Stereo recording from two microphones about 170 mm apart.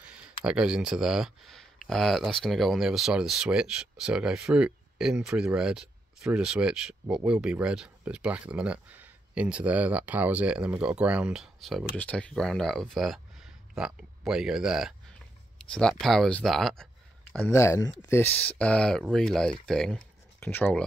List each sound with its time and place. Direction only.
0.1 s speech: 5° right (ahead or behind)
17.5 s speech: 15° left (ahead or behind)